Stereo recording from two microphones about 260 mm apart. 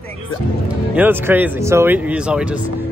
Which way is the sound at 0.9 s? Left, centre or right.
Centre.